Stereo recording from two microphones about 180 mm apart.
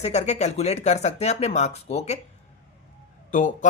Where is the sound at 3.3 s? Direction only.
45° left (ahead or behind).